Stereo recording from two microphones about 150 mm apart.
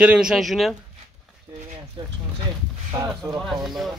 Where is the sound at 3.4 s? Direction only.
Centre (ahead or behind).